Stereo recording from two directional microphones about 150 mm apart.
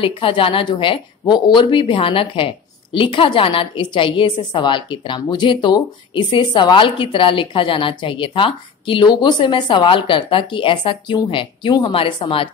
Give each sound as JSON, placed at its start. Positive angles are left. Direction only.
{"t": 0.0, "sound": "a woman's voice", "side_deg": 35}